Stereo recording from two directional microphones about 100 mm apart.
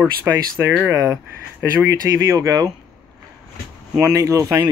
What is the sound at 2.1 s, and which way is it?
Speech, 35° right (ahead or behind).